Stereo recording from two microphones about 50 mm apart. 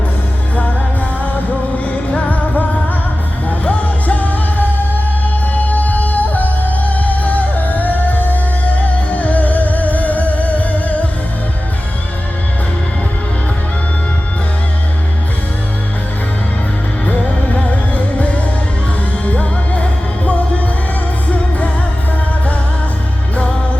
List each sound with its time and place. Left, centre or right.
2.1 s music: left
17.1 s music: left